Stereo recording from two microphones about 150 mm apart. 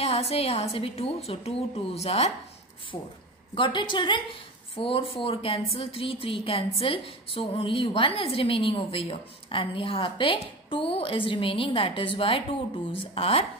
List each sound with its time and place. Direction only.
0.0 s a woman's voice: 40° left (ahead or behind)
3.5 s speech: 30° left (ahead or behind)